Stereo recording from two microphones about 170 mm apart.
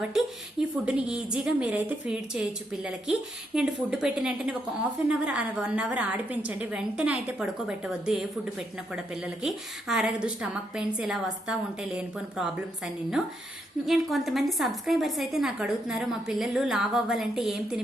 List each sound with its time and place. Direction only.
0.9 s a woman's voice: 5° right (ahead or behind)